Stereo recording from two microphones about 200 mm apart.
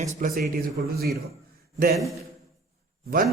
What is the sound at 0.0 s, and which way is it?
Speech, 45° right (ahead or behind).